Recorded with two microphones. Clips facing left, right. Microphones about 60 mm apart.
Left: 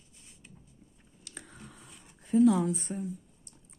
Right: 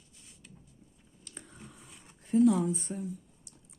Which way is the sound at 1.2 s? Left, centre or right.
Left.